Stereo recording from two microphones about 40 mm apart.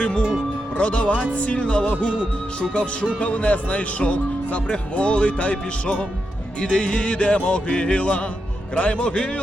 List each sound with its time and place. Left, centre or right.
0.0 s speech: left